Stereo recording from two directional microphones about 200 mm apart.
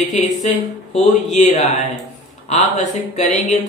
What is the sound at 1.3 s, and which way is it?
Speech, 35° left (ahead or behind).